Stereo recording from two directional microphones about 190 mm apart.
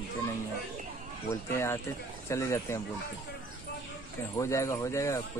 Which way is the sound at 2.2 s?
15° left (ahead or behind).